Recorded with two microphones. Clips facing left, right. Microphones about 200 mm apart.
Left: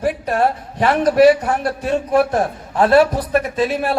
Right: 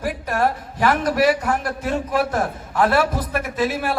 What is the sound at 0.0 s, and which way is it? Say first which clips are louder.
A man's voice: left 4 dB; 30° left (ahead or behind).